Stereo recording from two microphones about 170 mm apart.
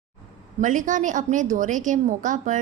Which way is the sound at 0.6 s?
50° right (ahead or behind).